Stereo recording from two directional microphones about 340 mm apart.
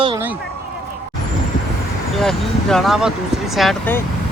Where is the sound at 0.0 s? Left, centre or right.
Centre.